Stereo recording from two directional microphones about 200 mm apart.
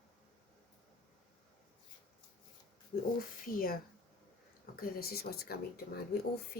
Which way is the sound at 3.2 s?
45° left (ahead or behind).